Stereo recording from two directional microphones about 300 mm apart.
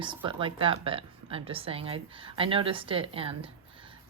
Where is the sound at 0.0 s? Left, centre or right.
Centre.